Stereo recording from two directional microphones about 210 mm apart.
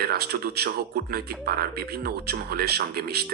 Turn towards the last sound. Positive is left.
turn(degrees=-50)  # may be behind; listen again after turning